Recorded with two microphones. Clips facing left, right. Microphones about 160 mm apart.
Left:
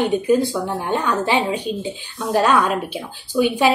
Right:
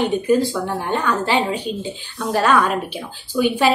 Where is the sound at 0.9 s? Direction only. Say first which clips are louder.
Even; 15° left (ahead or behind).